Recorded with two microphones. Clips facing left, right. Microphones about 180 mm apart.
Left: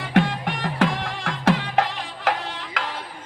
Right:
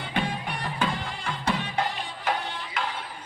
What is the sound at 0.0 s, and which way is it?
Music, 90° left.